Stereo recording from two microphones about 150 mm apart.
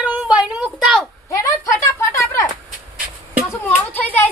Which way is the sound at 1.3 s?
20° left (ahead or behind).